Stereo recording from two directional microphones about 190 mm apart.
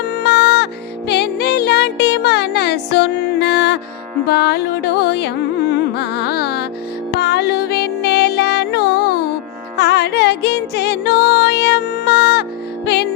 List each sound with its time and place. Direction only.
0.2 s music: 60° left (ahead or behind)